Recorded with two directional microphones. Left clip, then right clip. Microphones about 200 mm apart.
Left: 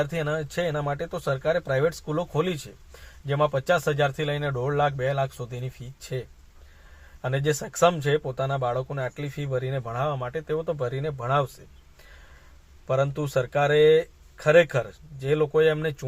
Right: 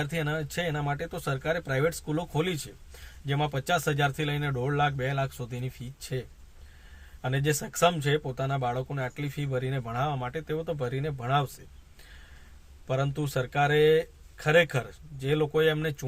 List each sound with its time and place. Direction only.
0.1 s speech: 15° right (ahead or behind)
12.9 s speech: 10° right (ahead or behind)